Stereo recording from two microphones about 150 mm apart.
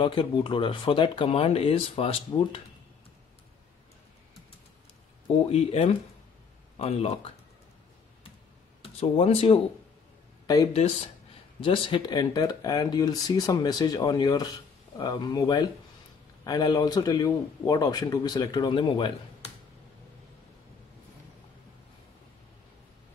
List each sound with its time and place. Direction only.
0.0 s speech: 35° left (ahead or behind)
5.5 s speech: 45° left (ahead or behind)
8.8 s speech: 40° left (ahead or behind)
10.4 s a man's voice: 25° left (ahead or behind)